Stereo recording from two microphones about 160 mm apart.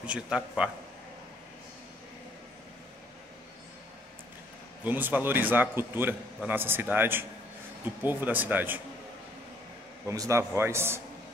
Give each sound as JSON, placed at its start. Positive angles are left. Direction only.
{"t": 0.0, "sound": "a man's voice", "side_deg": -5}
{"t": 4.8, "sound": "a man's voice", "side_deg": -10}
{"t": 10.0, "sound": "a man's voice", "side_deg": -20}